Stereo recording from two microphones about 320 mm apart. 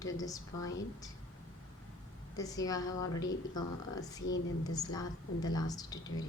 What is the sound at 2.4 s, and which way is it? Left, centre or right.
Speech, centre.